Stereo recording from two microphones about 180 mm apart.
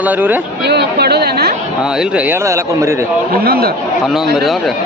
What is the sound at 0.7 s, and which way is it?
Speech, 65° right (ahead or behind).